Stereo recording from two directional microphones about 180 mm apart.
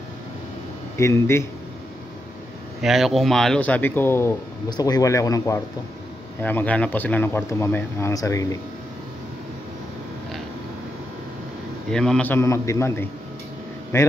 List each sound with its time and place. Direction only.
0.9 s speech: 15° left (ahead or behind)
2.8 s speech: centre (ahead or behind); by 8.5 s 20° left (ahead or behind)
11.9 s speech: 5° left (ahead or behind)